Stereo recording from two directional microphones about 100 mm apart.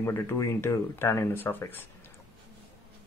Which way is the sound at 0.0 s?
25° left (ahead or behind).